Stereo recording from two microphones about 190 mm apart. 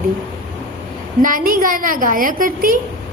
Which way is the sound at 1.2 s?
45° right (ahead or behind).